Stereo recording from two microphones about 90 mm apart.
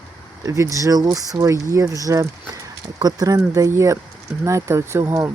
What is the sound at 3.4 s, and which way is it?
Speech, 35° right (ahead or behind).